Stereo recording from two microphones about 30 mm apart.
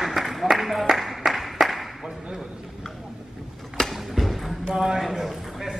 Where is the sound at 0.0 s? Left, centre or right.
Centre.